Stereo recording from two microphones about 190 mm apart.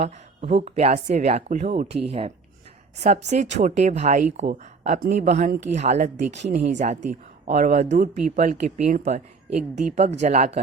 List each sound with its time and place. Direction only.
0.0 s speech: 35° right (ahead or behind)
6.4 s speech: 55° right (ahead or behind)
6.7 s speech: 40° right (ahead or behind)